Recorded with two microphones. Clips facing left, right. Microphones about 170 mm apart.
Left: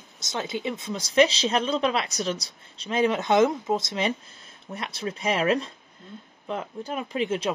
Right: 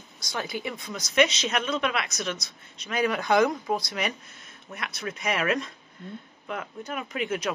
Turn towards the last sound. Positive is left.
turn(degrees=30)  # may be behind; listen again after turning